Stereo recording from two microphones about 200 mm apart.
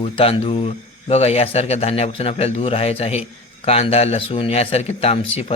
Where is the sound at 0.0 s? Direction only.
25° left (ahead or behind).